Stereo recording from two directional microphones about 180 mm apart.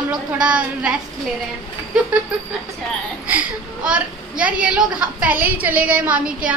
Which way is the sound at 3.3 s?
10° right (ahead or behind).